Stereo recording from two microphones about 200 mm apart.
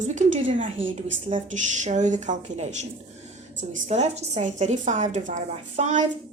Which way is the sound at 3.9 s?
35° right (ahead or behind).